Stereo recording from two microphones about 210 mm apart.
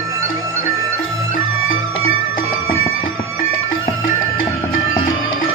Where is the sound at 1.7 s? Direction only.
70° left (ahead or behind).